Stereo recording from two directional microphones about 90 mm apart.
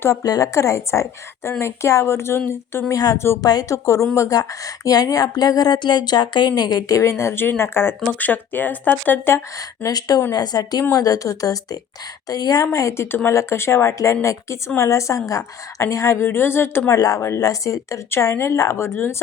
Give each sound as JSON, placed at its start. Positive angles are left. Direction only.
{"t": 0.0, "sound": "speech", "side_deg": 35}
{"t": 2.9, "sound": "speech", "side_deg": 40}
{"t": 9.6, "sound": "speech", "side_deg": 45}
{"t": 13.1, "sound": "speech", "side_deg": 25}
{"t": 16.9, "sound": "speech", "side_deg": 40}